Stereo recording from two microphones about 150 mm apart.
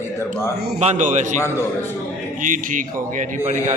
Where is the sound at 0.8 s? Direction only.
55° right (ahead or behind).